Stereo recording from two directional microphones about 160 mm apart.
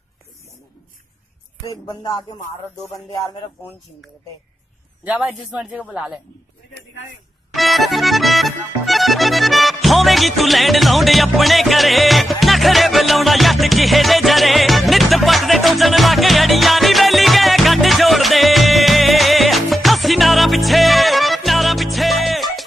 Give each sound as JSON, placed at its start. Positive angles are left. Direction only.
{"t": 1.9, "sound": "music", "side_deg": 25}
{"t": 5.0, "sound": "speech", "side_deg": -5}
{"t": 7.5, "sound": "accordion", "side_deg": 0}